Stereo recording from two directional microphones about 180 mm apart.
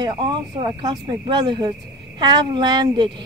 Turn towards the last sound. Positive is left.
turn(degrees=-25)  # may be behind; listen again after turning